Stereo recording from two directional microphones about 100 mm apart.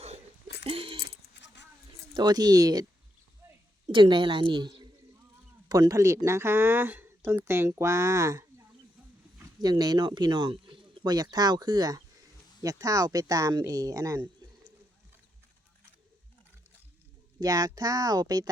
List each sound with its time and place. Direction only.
0.6 s a sound: 65° right (ahead or behind)
2.1 s speech: 40° right (ahead or behind)
3.4 s a sound: 25° right (ahead or behind)
3.9 s a woman's voice: 55° right (ahead or behind); by 8.6 s 30° right (ahead or behind)
9.6 s speech: 45° right (ahead or behind)
17.4 s speech: 35° right (ahead or behind)